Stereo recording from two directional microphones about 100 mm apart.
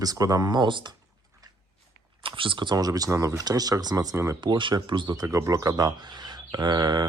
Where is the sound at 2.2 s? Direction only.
60° right (ahead or behind).